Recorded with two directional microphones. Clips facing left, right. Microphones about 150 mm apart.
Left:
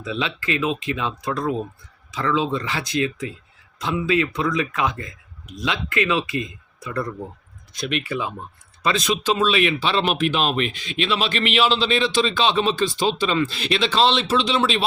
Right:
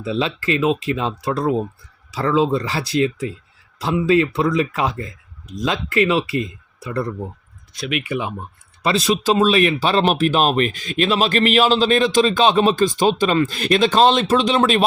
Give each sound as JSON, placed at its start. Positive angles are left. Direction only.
{"t": 0.0, "sound": "speech", "side_deg": -35}
{"t": 7.8, "sound": "speech", "side_deg": -5}
{"t": 8.0, "sound": "speech", "side_deg": -20}
{"t": 8.8, "sound": "speech", "side_deg": -35}